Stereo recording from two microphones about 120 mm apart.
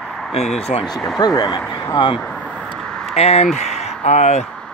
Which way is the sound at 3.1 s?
60° left (ahead or behind).